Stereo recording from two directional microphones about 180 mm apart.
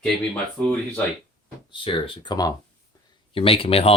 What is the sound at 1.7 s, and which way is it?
Speech, 30° left (ahead or behind).